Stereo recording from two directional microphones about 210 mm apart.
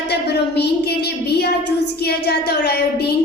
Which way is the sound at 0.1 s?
50° left (ahead or behind).